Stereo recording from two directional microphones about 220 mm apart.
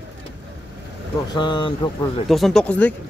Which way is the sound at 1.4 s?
20° left (ahead or behind).